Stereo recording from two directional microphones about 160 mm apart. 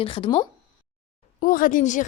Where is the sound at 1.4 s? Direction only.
60° left (ahead or behind).